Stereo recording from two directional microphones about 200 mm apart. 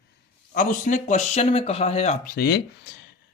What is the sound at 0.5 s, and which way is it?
Speech, 40° left (ahead or behind).